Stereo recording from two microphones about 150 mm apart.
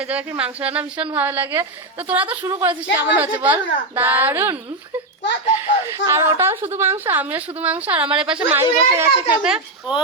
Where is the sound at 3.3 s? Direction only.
10° right (ahead or behind).